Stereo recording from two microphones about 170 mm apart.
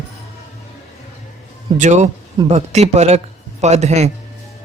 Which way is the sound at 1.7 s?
45° right (ahead or behind).